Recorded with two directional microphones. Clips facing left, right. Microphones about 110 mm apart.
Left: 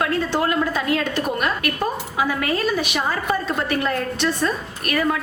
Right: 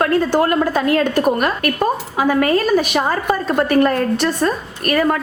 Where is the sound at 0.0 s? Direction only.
45° right (ahead or behind).